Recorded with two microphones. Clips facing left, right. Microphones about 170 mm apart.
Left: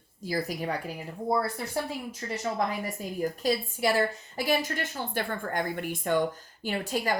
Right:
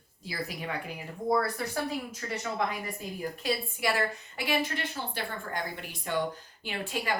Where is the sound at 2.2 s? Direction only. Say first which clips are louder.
Left 4 dB; 30° left (ahead or behind).